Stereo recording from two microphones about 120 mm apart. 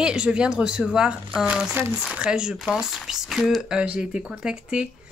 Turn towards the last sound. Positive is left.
turn(degrees=-5)  # may be behind; listen again after turning